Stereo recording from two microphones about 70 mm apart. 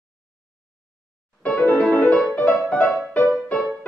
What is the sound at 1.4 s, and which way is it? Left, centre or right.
Music, centre.